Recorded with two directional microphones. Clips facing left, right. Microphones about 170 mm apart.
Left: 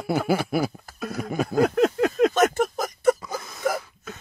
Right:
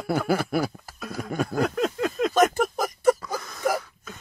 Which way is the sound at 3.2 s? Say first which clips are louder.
Even; 5° left (ahead or behind).